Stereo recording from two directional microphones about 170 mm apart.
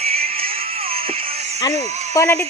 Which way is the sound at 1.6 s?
20° left (ahead or behind).